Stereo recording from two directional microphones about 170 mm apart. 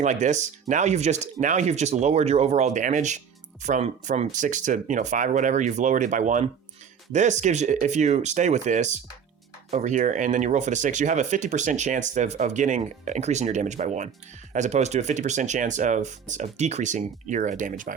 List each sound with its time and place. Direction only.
0.0 s speech: 45° right (ahead or behind)